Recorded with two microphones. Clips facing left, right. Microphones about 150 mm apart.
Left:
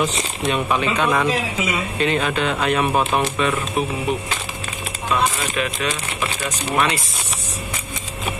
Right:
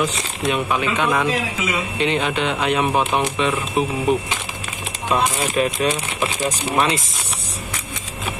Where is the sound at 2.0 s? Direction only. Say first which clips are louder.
Even; 20° right (ahead or behind).